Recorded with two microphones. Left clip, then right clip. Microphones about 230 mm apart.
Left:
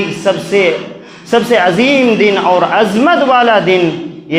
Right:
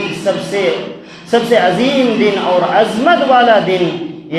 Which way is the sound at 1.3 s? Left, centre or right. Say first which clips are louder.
Left 1 dB; left.